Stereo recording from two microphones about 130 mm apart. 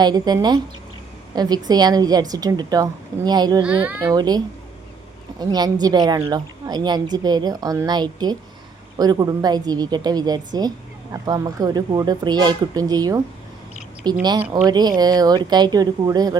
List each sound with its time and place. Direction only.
0.0 s a woman's voice: 35° right (ahead or behind)
3.6 s a child's voice: 10° right (ahead or behind)
4.0 s a woman's voice: 30° right (ahead or behind)